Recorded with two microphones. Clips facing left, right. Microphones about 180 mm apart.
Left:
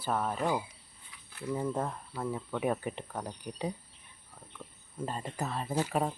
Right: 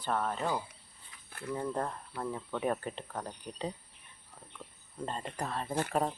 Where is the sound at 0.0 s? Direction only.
5° left (ahead or behind).